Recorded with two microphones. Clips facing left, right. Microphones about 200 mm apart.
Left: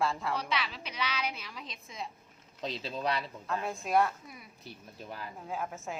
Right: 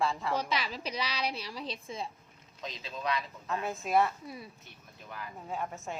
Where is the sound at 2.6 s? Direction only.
35° left (ahead or behind).